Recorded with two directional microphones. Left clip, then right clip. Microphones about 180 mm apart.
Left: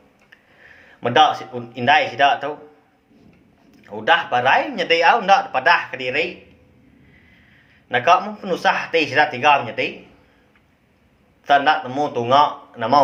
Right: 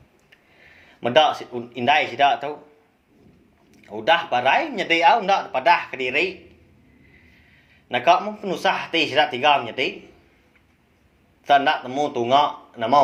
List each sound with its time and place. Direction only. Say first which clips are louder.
0.6 s speech: left 2 dB; 30° right (ahead or behind)
3.7 s a sound: left 2 dB; 35° right (ahead or behind)
4.3 s speech: left 3 dB; 30° right (ahead or behind)
5.9 s speech: left 1 dB; 35° right (ahead or behind)
7.9 s speech: left 2 dB; 30° right (ahead or behind)
11.4 s speech: left 2 dB; 30° right (ahead or behind)